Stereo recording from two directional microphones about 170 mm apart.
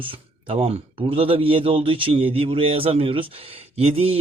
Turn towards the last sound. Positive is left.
turn(degrees=-35)  # may be behind; listen again after turning